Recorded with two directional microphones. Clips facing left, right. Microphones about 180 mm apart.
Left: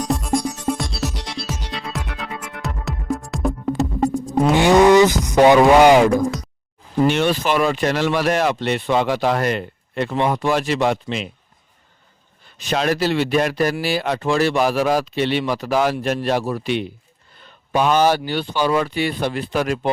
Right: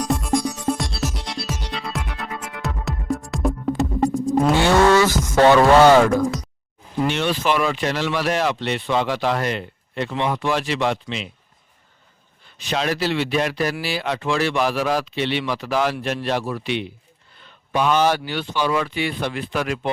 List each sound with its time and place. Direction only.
0.0 s music: centre (ahead or behind)
4.5 s speech: 15° left (ahead or behind)
7.0 s speech: 45° left (ahead or behind)
12.5 s speech: 45° left (ahead or behind)
17.4 s a sound: 40° left (ahead or behind)
18.3 s speech: 40° left (ahead or behind)